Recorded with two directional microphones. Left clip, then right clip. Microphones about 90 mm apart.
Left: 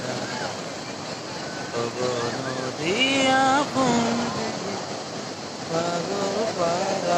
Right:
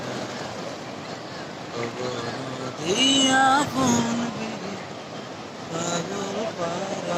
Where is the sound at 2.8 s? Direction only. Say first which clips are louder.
Right 1 dB; 35° right (ahead or behind).